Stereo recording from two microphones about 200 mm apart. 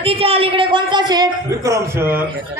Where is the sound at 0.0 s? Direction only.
30° right (ahead or behind).